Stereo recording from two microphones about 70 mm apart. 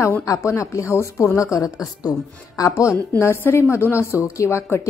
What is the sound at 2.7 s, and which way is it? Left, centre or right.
Speech, left.